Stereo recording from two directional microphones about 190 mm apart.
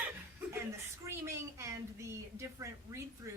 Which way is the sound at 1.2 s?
15° right (ahead or behind).